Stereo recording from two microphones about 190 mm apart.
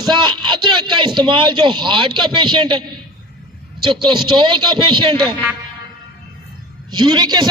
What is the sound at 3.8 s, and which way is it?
A man's voice, 25° right (ahead or behind).